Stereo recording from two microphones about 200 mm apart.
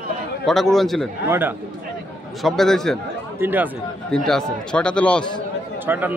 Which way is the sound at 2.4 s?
Centre (ahead or behind).